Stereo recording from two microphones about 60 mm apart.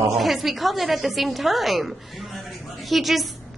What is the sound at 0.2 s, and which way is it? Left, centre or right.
A woman's voice, centre.